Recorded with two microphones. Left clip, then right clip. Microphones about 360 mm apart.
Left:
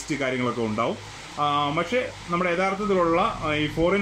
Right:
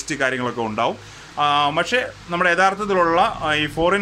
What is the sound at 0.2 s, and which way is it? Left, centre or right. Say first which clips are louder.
Speech: right 5 dB; right.